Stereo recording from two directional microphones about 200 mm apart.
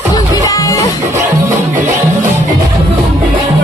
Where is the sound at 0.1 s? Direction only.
15° left (ahead or behind).